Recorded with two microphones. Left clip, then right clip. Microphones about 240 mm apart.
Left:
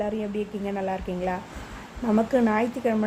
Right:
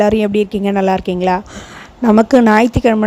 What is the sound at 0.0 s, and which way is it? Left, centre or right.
A woman's voice, right.